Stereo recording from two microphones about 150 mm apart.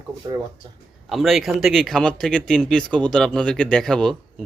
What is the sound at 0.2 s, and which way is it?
Speech, 30° right (ahead or behind).